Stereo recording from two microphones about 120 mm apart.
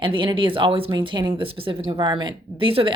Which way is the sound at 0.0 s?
45° right (ahead or behind).